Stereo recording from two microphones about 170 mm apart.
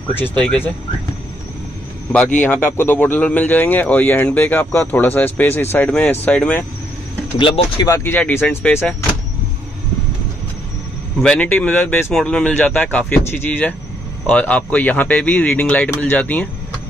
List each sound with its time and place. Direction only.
0.1 s a man's voice: 10° left (ahead or behind)
2.1 s a man's voice: 10° left (ahead or behind)
7.3 s speech: 30° left (ahead or behind)
7.8 s a man's voice: 15° left (ahead or behind)
11.1 s a man's voice: 5° left (ahead or behind)